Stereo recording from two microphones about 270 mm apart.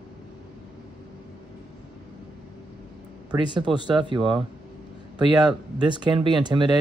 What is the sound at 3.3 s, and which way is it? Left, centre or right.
Speech, centre.